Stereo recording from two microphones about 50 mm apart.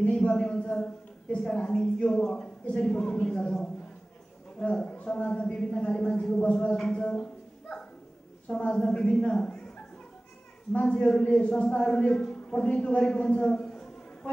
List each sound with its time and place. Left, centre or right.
0.0 s a man's voice: left
8.5 s speech: left
10.7 s speech: left
11.1 s speech: centre